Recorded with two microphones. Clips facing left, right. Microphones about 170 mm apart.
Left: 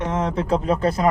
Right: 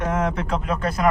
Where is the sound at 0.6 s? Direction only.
30° left (ahead or behind).